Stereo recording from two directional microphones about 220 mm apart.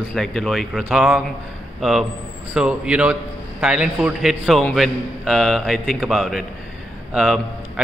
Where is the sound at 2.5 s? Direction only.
5° right (ahead or behind).